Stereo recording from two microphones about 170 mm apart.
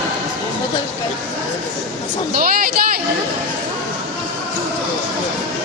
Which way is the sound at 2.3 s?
55° right (ahead or behind).